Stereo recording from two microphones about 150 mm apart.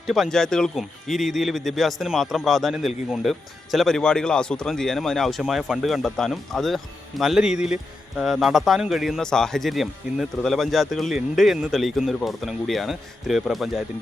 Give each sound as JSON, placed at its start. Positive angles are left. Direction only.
{"t": 0.1, "sound": "speech", "side_deg": 0}